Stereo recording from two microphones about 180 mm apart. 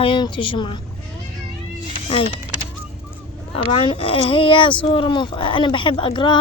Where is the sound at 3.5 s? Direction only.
30° left (ahead or behind).